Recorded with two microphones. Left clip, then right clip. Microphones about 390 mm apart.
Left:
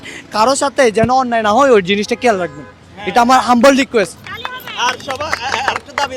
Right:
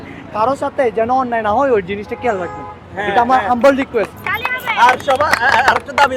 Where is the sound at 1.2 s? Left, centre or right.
Left.